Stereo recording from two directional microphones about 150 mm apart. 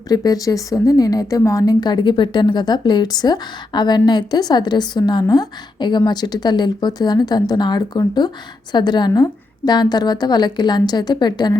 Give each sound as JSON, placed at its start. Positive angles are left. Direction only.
{"t": 0.1, "sound": "a woman's voice", "side_deg": 25}